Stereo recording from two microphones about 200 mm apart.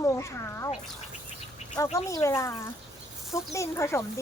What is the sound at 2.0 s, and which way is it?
Speech, 15° left (ahead or behind).